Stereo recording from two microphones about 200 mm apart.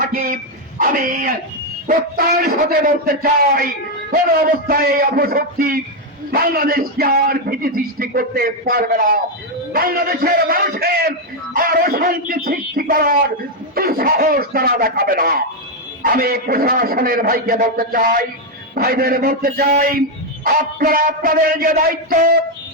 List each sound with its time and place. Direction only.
0.0 s bow-wow: 45° right (ahead or behind)
0.8 s a man's voice: 45° right (ahead or behind)